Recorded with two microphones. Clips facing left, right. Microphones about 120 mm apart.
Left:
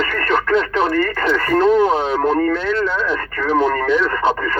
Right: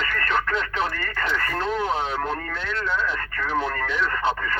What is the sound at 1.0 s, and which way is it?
Speech, 60° left (ahead or behind).